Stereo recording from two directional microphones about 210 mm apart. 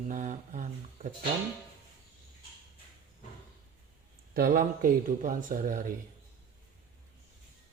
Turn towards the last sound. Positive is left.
turn(degrees=-40)  # may be behind; listen again after turning